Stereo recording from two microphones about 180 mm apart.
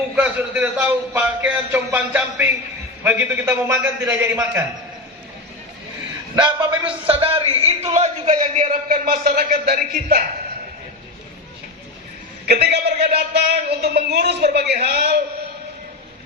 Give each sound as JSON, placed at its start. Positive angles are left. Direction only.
{"t": 0.2, "sound": "speech", "side_deg": -10}
{"t": 6.3, "sound": "a man's voice", "side_deg": -25}
{"t": 12.5, "sound": "speech", "side_deg": -60}